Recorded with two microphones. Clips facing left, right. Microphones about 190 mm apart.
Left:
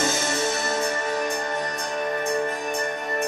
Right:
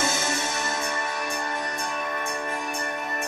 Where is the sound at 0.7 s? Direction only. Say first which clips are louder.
Left 5 dB; 35° left (ahead or behind).